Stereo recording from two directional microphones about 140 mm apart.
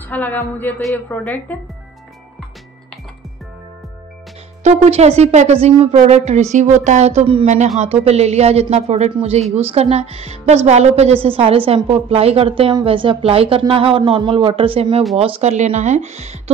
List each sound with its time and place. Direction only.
0.1 s a woman's voice: 10° left (ahead or behind)
4.6 s speech: 50° right (ahead or behind)
15.5 s speech: 55° right (ahead or behind)